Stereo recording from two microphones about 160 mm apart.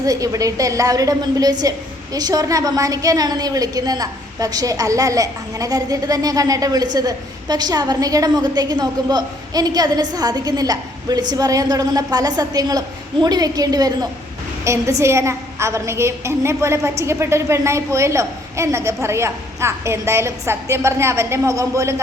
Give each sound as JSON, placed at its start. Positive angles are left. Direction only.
{"t": 0.0, "sound": "a woman's voice", "side_deg": -20}